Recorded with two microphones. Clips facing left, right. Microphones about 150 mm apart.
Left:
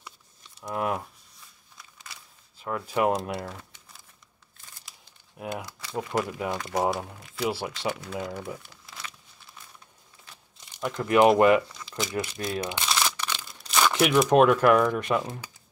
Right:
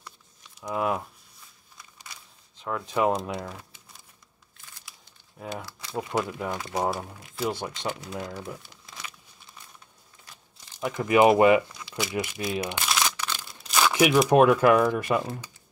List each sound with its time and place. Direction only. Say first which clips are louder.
0.6 s speech: right 1 dB; centre (ahead or behind)
2.5 s speech: even; 5° left (ahead or behind)
5.4 s speech: left 2 dB; 10° left (ahead or behind)
5.9 s speech: even; centre (ahead or behind)
6.5 s speech: left 2 dB; 10° right (ahead or behind)
7.4 s speech: left 1 dB; 5° left (ahead or behind)
7.9 s speech: left 1 dB; 20° right (ahead or behind)
10.8 s speech: even; 5° right (ahead or behind)
12.4 s crumpling: right 1 dB; 5° right (ahead or behind)
13.4 s speech: even; centre (ahead or behind)